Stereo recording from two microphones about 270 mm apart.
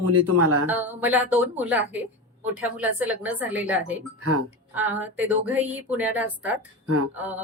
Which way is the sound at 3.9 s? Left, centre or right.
Right.